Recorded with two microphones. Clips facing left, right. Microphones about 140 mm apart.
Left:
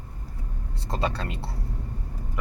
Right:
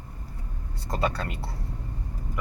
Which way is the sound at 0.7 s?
30° left (ahead or behind).